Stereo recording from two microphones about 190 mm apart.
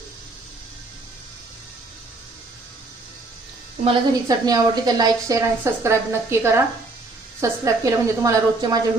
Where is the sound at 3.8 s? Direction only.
25° right (ahead or behind).